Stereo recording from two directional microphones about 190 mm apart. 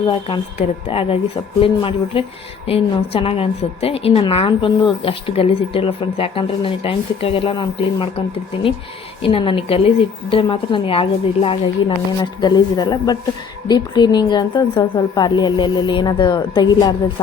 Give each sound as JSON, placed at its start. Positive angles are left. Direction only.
{"t": 0.0, "sound": "a woman's voice", "side_deg": 30}
{"t": 9.2, "sound": "a woman's voice", "side_deg": 30}